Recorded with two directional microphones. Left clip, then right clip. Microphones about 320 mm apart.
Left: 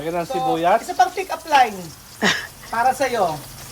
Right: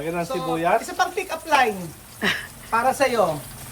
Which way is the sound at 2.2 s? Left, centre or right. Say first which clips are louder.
Left 4 dB; centre.